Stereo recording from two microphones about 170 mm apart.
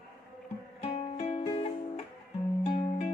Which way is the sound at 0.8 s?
35° left (ahead or behind).